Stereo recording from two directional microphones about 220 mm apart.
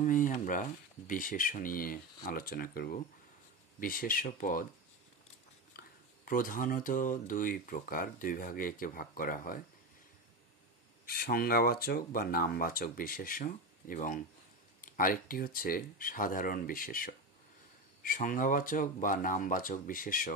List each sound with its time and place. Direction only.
0.0 s speech: 35° left (ahead or behind)
5.7 s speech: 40° left (ahead or behind)
11.1 s speech: 45° left (ahead or behind)